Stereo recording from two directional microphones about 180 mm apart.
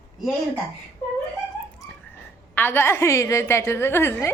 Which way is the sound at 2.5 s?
10° left (ahead or behind).